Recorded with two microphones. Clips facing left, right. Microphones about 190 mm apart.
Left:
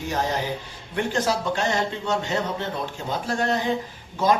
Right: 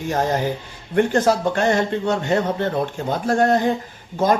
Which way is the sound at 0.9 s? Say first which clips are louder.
Right 7 dB; 50° right (ahead or behind).